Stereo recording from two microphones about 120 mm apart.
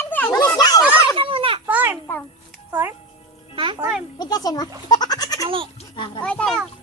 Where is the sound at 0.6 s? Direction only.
35° left (ahead or behind).